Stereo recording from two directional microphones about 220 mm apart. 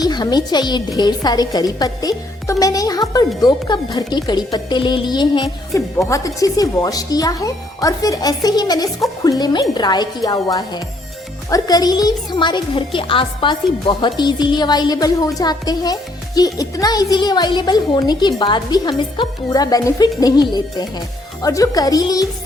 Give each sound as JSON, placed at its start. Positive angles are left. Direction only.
{"t": 0.0, "sound": "a woman's voice", "side_deg": 20}